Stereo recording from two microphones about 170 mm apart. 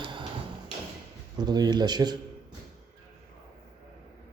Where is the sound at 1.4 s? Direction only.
25° right (ahead or behind).